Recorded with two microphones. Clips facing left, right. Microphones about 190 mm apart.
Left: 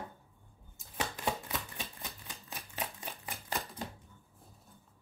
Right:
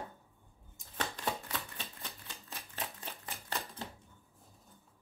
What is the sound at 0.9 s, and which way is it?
Chopping, 10° left (ahead or behind).